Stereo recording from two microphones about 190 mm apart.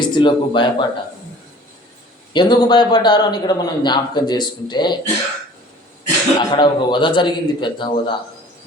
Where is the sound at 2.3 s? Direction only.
25° left (ahead or behind).